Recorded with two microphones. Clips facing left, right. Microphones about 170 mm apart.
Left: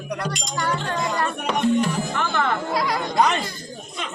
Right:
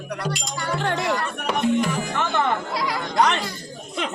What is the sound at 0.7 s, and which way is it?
Music, 70° right (ahead or behind).